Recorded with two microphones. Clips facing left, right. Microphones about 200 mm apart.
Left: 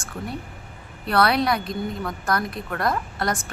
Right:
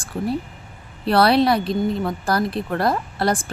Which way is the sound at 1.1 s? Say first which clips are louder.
Right 5 dB; 30° right (ahead or behind).